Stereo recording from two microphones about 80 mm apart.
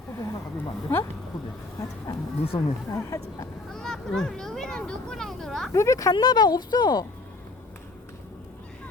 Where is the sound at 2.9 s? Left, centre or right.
Left.